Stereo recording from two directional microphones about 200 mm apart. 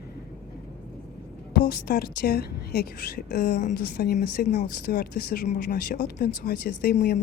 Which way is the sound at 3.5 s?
35° left (ahead or behind).